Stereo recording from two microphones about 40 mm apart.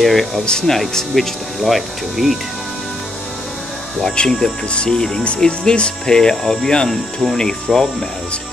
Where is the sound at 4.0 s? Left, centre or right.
Centre.